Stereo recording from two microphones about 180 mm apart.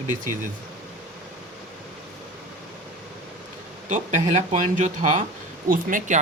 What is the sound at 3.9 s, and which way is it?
Speech, 40° right (ahead or behind).